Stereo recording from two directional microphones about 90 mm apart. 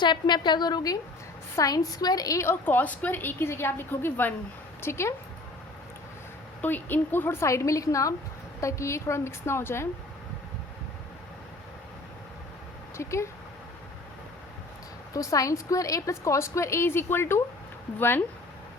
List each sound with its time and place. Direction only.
0.0 s a woman's voice: 55° left (ahead or behind); by 5.1 s 30° left (ahead or behind)
6.6 s a woman's voice: 20° left (ahead or behind)
13.0 s a woman's voice: 30° left (ahead or behind)
15.1 s a woman's voice: 40° left (ahead or behind)